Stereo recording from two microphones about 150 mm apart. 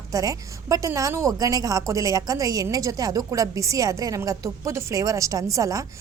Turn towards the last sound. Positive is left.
turn(degrees=-20)  # may be behind; listen again after turning